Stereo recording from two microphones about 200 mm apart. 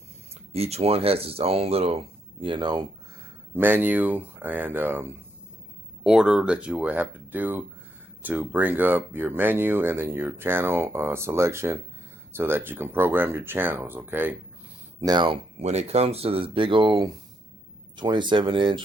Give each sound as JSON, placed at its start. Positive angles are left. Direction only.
{"t": 0.5, "sound": "speech", "side_deg": -30}
{"t": 3.5, "sound": "speech", "side_deg": -10}
{"t": 15.0, "sound": "speech", "side_deg": -20}